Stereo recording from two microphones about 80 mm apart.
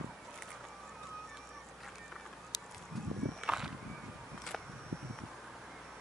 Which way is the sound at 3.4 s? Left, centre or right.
Centre.